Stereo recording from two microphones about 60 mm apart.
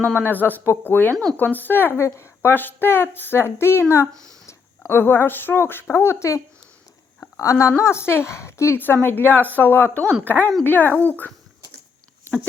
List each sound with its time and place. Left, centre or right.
0.1 s speech: left
2.0 s a woman's voice: left
2.6 s speech: left
4.1 s speech: right
4.9 s a woman's voice: left
8.8 s speech: left